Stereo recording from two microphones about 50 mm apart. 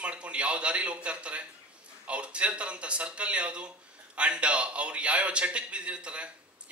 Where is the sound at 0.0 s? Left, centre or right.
Right.